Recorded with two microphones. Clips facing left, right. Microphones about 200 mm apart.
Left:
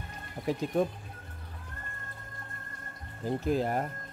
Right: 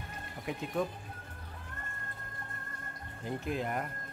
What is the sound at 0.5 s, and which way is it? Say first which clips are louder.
Speech: left 6 dB; 35° left (ahead or behind).